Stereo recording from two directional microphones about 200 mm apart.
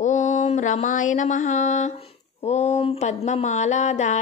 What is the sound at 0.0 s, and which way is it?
Mantra, 40° left (ahead or behind).